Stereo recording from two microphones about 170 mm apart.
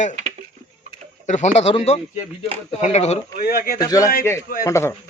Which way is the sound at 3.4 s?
60° left (ahead or behind).